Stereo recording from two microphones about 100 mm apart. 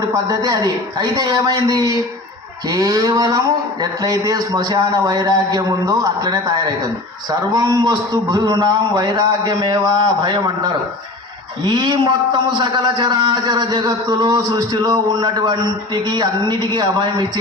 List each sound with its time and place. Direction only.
0.0 s a man's voice: 40° right (ahead or behind)